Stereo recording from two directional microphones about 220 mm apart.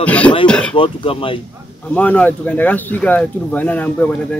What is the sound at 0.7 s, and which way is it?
Speech, 25° left (ahead or behind).